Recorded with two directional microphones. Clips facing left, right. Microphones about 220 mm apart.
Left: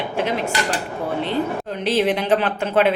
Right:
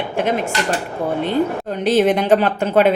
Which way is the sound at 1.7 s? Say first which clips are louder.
Right 5 dB; 45° right (ahead or behind).